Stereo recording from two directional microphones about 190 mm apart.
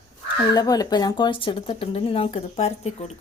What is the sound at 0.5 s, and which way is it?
Speech, 20° left (ahead or behind).